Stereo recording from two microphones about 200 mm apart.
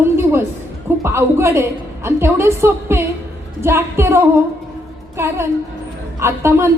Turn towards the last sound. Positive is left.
turn(degrees=-15)  # may be behind; listen again after turning